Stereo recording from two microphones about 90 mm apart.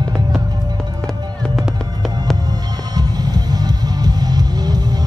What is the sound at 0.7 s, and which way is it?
Music, 5° left (ahead or behind).